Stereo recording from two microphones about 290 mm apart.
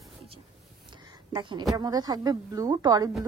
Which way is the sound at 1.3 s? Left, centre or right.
Centre.